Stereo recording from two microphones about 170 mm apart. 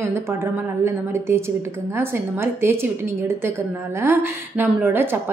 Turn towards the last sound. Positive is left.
turn(degrees=-15)  # may be behind; listen again after turning